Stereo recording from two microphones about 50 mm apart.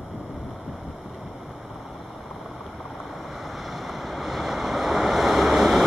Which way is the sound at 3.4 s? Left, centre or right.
Centre.